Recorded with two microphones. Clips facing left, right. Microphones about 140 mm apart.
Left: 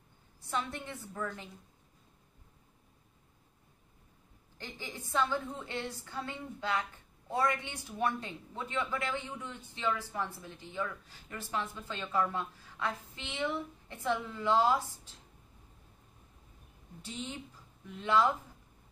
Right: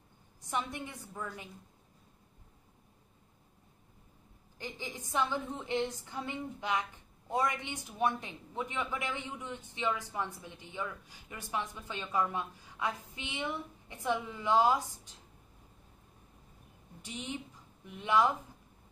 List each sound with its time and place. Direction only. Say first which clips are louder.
0.4 s a woman's voice: even; 15° right (ahead or behind)
4.6 s a woman's voice: right 2 dB; 10° right (ahead or behind)
17.0 s a woman's voice: right 1 dB; 15° right (ahead or behind)